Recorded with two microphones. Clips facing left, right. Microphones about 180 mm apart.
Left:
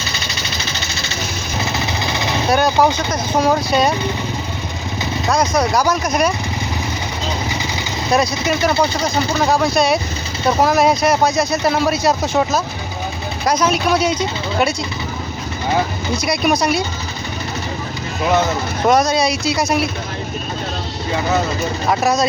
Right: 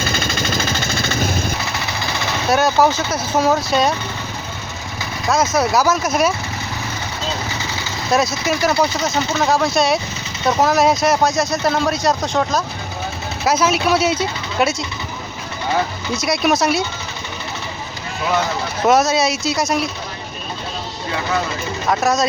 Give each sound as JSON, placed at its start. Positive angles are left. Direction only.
{"t": 0.0, "sound": "a sound", "side_deg": -50}
{"t": 2.5, "sound": "speech", "side_deg": 0}
{"t": 5.3, "sound": "speech", "side_deg": -5}
{"t": 8.1, "sound": "speech", "side_deg": 0}
{"t": 16.2, "sound": "speech", "side_deg": 0}
{"t": 18.9, "sound": "speech", "side_deg": -5}
{"t": 21.8, "sound": "speech", "side_deg": 0}